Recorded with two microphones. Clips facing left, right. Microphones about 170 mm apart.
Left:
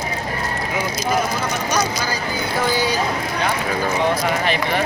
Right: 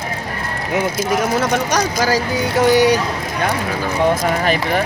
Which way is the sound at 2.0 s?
85° right.